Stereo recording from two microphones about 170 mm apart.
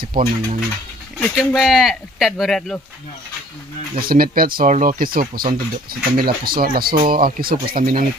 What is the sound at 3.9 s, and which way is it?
Speech, 60° right (ahead or behind).